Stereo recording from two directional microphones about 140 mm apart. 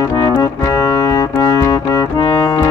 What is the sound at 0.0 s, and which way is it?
Music, 25° left (ahead or behind).